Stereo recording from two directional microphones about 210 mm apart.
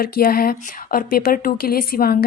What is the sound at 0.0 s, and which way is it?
Speech, 45° left (ahead or behind).